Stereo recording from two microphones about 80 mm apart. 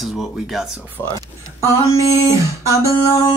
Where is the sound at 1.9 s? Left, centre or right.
Left.